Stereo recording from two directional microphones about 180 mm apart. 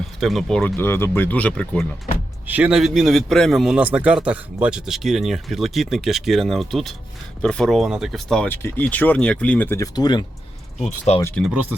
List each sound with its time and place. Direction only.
0.2 s speech: centre (ahead or behind)
2.5 s a man's voice: 5° right (ahead or behind); by 10.2 s 25° left (ahead or behind)
10.8 s speech: 40° left (ahead or behind)
11.3 s a man's voice: centre (ahead or behind)